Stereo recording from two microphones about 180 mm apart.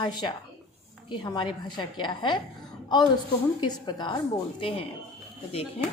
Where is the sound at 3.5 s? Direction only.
25° left (ahead or behind).